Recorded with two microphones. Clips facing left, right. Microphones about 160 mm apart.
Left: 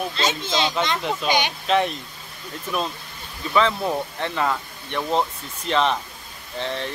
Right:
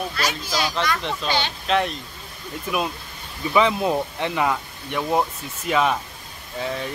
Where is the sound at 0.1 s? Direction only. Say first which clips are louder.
Left 2 dB; 25° left (ahead or behind).